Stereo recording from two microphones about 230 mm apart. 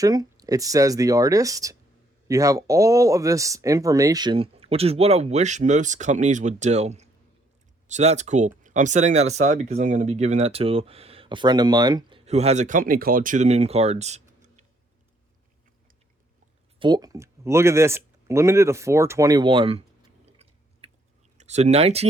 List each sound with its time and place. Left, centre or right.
0.0 s speech: centre
16.8 s speech: centre